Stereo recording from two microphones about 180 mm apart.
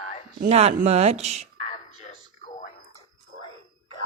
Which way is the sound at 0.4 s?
35° right (ahead or behind).